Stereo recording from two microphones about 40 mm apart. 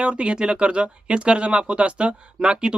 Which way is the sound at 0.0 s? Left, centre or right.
Right.